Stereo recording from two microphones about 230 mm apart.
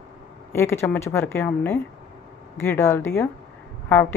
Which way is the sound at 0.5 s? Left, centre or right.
Centre.